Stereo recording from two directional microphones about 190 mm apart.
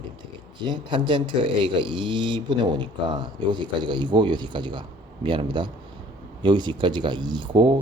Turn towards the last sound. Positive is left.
turn(degrees=-25)  # may be behind; listen again after turning